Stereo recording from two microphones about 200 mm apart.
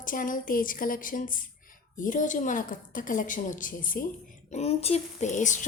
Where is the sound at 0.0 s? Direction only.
40° left (ahead or behind).